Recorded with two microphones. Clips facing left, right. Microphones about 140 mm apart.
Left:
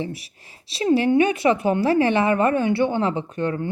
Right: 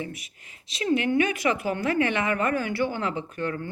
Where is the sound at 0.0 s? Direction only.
30° left (ahead or behind).